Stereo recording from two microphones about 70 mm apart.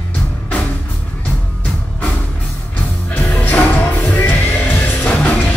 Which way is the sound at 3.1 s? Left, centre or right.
Left.